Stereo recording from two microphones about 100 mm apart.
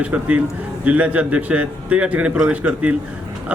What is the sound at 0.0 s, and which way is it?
A man's voice, 15° right (ahead or behind).